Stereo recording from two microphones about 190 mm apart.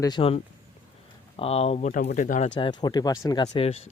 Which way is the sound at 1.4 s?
30° left (ahead or behind).